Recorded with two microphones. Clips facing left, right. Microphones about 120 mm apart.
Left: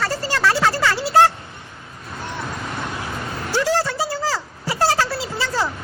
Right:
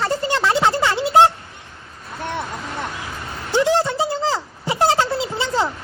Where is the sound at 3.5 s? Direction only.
20° right (ahead or behind).